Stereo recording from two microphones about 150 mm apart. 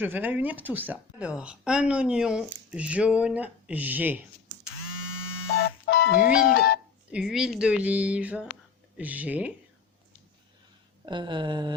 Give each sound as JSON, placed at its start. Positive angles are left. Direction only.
{"t": 0.0, "sound": "speech", "side_deg": -10}
{"t": 5.9, "sound": "speech", "side_deg": 90}
{"t": 7.1, "sound": "speech", "side_deg": -5}
{"t": 11.0, "sound": "speech", "side_deg": -30}